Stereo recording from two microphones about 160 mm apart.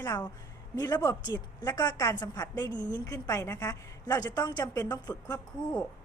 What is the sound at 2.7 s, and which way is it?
Speech, 15° right (ahead or behind).